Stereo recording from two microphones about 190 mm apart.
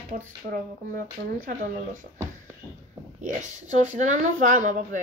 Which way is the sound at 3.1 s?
40° right (ahead or behind).